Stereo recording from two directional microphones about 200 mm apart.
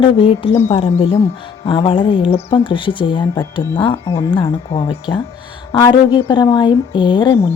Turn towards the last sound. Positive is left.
turn(degrees=20)  # may be behind; listen again after turning